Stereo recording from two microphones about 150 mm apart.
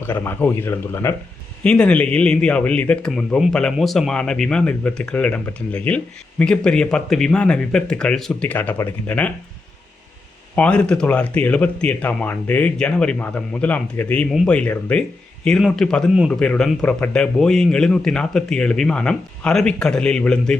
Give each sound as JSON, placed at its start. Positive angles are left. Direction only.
{"t": 0.0, "sound": "speech", "side_deg": 15}
{"t": 1.6, "sound": "speech", "side_deg": 5}
{"t": 10.5, "sound": "speech", "side_deg": 10}